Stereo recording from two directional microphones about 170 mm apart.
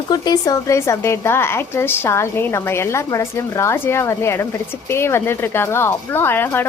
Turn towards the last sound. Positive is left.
turn(degrees=15)  # may be behind; listen again after turning